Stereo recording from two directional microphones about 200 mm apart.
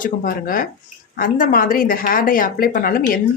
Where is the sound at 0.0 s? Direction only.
45° left (ahead or behind).